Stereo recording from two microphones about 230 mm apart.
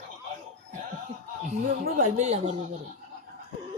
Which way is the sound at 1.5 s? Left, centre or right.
Right.